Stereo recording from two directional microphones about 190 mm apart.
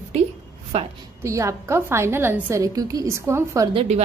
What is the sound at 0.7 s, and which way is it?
Speech, 35° right (ahead or behind).